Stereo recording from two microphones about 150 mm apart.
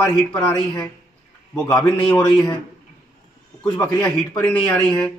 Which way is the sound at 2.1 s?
25° left (ahead or behind).